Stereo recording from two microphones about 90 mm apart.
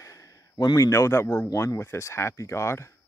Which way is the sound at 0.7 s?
35° left (ahead or behind).